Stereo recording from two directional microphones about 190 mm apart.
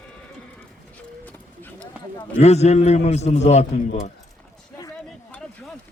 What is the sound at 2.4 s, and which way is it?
A man's voice, 35° left (ahead or behind).